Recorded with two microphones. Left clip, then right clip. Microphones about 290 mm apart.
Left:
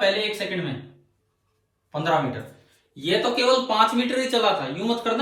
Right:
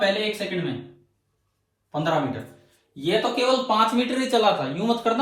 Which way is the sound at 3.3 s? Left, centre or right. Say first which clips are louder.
Left 3 dB; right.